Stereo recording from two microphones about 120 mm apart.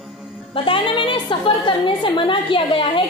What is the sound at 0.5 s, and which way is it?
A woman's voice, 45° left (ahead or behind).